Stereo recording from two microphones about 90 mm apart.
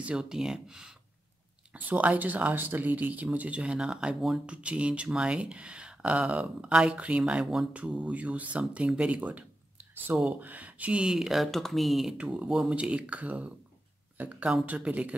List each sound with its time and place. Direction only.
0.0 s speech: 10° right (ahead or behind)